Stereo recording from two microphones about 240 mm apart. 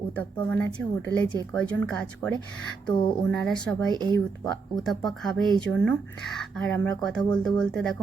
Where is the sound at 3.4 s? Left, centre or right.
Centre.